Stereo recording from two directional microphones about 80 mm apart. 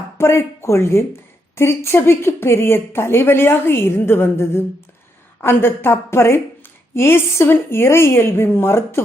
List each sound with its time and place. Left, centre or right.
0.2 s a woman's voice: left